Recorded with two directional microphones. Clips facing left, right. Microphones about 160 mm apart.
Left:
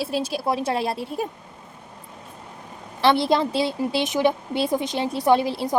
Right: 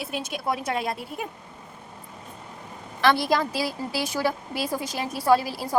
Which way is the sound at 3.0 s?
25° left (ahead or behind).